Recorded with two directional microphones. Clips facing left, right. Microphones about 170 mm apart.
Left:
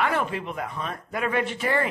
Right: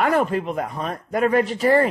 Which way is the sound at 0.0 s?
40° right (ahead or behind).